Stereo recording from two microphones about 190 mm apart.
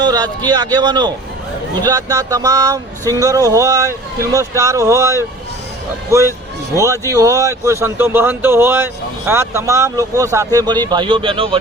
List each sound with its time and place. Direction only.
0.0 s speech: 20° right (ahead or behind)